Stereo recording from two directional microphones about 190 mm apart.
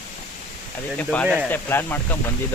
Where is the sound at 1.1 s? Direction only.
5° left (ahead or behind).